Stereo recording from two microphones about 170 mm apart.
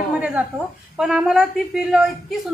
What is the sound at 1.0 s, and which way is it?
A woman's voice, 5° right (ahead or behind).